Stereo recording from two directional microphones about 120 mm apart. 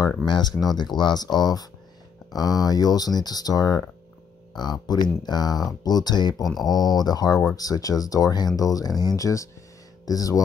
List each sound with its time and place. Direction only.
0.2 s speech: 35° left (ahead or behind)
6.4 s speech: centre (ahead or behind)
6.7 s speech: 35° left (ahead or behind)